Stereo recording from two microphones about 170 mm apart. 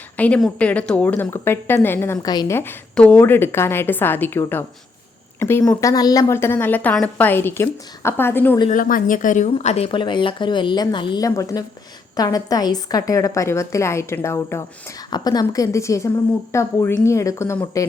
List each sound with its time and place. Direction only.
0.2 s a woman's voice: 5° left (ahead or behind); by 2.6 s 25° left (ahead or behind)
2.6 s a woman's voice: 10° left (ahead or behind)
8.7 s a woman's voice: 55° left (ahead or behind); by 17.8 s 15° left (ahead or behind)